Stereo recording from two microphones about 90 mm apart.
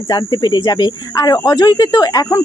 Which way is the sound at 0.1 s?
50° left (ahead or behind).